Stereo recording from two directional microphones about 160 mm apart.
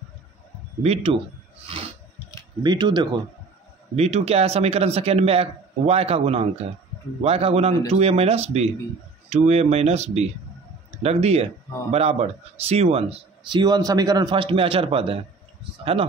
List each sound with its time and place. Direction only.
0.8 s speech: 40° right (ahead or behind)
2.6 s speech: 25° right (ahead or behind)
3.9 s speech: 40° right (ahead or behind)